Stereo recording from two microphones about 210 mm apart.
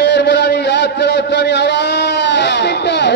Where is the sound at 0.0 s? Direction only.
55° left (ahead or behind).